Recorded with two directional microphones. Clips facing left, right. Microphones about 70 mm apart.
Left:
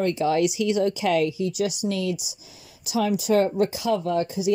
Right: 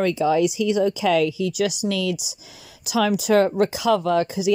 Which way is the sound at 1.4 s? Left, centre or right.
Right.